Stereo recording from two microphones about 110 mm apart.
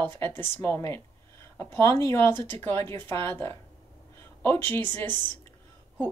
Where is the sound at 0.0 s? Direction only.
20° left (ahead or behind).